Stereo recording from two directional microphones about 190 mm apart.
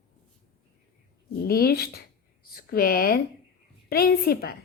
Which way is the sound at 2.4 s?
50° left (ahead or behind).